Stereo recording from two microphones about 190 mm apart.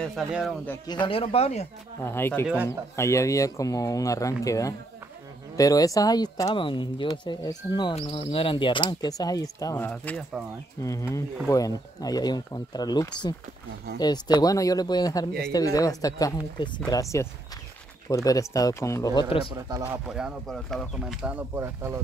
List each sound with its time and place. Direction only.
0.0 s speech: centre (ahead or behind)
0.8 s speech: 25° left (ahead or behind)
2.0 s speech: 10° left (ahead or behind)
2.4 s speech: 10° right (ahead or behind)
3.0 s speech: 15° left (ahead or behind)
9.8 s speech: 5° left (ahead or behind); by 19.4 s 25° left (ahead or behind)
19.5 s speech: 15° right (ahead or behind)
20.1 s speech: 5° right (ahead or behind)